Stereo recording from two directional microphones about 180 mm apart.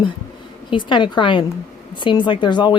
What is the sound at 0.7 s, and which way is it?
Speech, 25° left (ahead or behind).